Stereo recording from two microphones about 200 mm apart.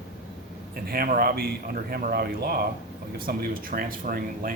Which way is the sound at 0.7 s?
50° right (ahead or behind).